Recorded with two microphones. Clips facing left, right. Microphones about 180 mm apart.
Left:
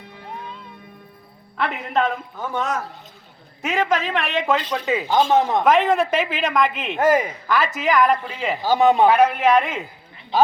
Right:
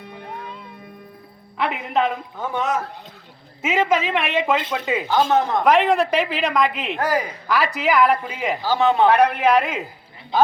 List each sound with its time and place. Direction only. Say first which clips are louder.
1.5 s a man's voice: right 1 dB; 5° right (ahead or behind)
5.0 s speech: left 1 dB; 20° left (ahead or behind)
5.6 s a man's voice: even; centre (ahead or behind)
7.0 s speech: left 5 dB; 20° left (ahead or behind)
7.4 s a man's voice: even; centre (ahead or behind)
8.6 s speech: left 2 dB; 15° left (ahead or behind)
9.0 s a man's voice: even; 5° left (ahead or behind)